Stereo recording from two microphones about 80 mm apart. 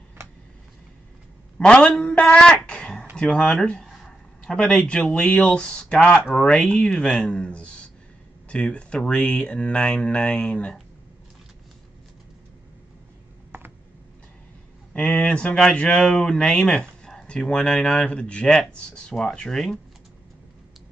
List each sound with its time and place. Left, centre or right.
1.6 s a sound: centre
3.2 s speech: centre
13.5 s computer keyboard: right
15.0 s speech: centre